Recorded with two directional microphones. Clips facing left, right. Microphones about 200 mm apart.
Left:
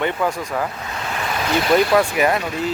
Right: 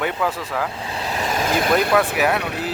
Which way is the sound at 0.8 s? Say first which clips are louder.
Right 1 dB; 30° right (ahead or behind).